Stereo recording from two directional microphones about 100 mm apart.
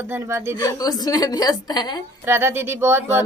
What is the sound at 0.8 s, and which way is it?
Speech, 40° left (ahead or behind).